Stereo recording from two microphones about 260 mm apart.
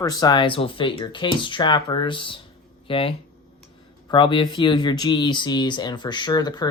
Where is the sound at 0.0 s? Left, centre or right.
Centre.